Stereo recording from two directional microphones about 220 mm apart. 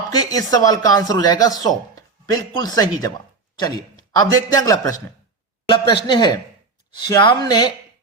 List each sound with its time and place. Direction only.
0.3 s speech: 15° left (ahead or behind)